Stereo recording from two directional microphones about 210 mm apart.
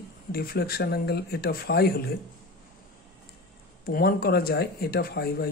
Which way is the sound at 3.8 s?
45° left (ahead or behind).